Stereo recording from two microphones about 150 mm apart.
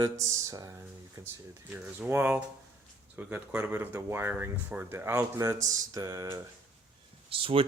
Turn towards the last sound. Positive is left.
turn(degrees=-40)  # may be behind; listen again after turning